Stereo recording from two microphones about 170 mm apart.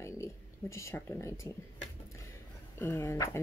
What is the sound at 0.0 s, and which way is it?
Speech, 15° left (ahead or behind).